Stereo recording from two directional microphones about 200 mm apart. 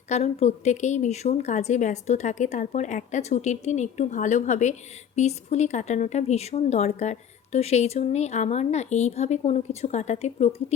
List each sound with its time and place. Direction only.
0.1 s a woman's voice: 35° left (ahead or behind)